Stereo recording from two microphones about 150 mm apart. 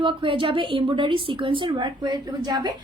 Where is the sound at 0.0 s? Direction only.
35° right (ahead or behind).